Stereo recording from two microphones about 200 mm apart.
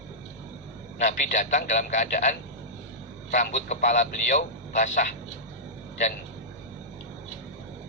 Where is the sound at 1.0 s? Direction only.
40° left (ahead or behind).